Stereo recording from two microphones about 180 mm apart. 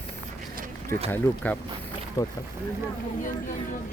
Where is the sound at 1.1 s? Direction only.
10° left (ahead or behind).